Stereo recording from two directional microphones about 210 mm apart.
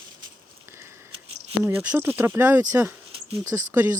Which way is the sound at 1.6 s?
10° right (ahead or behind).